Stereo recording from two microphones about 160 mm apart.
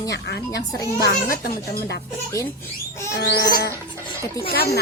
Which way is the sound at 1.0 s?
70° left (ahead or behind).